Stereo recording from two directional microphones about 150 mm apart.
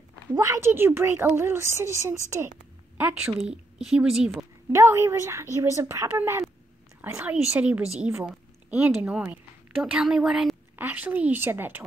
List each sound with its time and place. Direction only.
0.4 s a woman's voice: 20° right (ahead or behind)
4.7 s a woman's voice: 20° right (ahead or behind)